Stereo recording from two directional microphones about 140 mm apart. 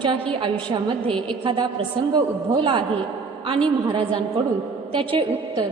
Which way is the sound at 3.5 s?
40° right (ahead or behind).